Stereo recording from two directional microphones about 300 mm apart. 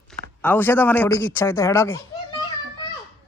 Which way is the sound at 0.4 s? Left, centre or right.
Centre.